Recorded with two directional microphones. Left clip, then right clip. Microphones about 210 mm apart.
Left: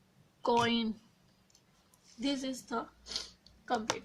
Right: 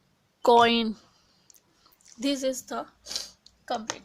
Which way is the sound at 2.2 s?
50° right (ahead or behind).